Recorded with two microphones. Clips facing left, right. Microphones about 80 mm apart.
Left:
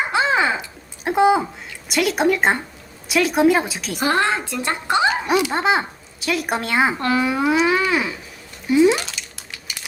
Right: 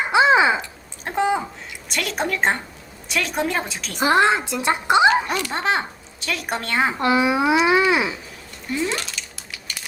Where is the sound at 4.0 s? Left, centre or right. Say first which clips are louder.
Right 2 dB; centre.